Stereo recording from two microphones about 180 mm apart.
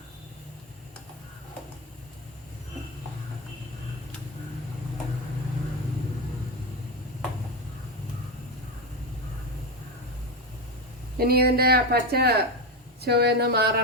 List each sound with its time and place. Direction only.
11.2 s speech: 60° right (ahead or behind)